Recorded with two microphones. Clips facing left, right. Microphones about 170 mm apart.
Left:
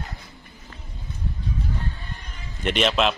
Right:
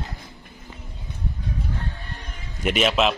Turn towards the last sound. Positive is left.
turn(degrees=-5)  # may be behind; listen again after turning